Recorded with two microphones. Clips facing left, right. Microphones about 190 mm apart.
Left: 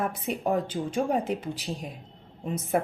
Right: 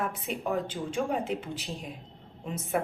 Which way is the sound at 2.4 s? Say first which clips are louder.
Left 4 dB; 40° left (ahead or behind).